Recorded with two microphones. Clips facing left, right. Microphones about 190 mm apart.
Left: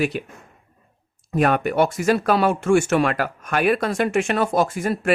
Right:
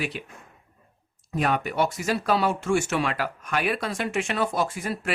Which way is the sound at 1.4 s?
55° left (ahead or behind).